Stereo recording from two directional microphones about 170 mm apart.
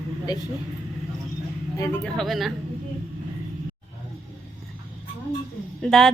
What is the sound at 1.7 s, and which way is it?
Speech, 20° left (ahead or behind).